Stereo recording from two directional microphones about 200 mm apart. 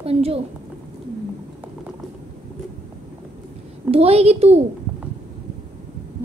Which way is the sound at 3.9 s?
30° right (ahead or behind).